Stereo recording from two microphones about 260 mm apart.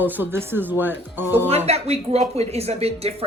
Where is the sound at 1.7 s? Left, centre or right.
Right.